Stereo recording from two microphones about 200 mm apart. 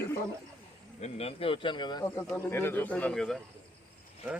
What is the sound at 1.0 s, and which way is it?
Speech, 30° left (ahead or behind).